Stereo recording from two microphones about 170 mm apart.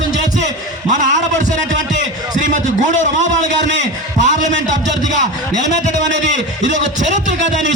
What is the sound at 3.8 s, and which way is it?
A man's voice, 45° right (ahead or behind).